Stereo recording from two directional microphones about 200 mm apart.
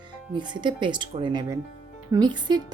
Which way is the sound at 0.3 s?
25° right (ahead or behind).